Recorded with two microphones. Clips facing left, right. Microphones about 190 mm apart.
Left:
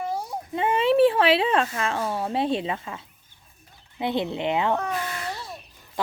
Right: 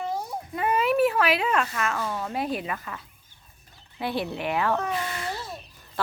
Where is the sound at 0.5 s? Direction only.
25° left (ahead or behind).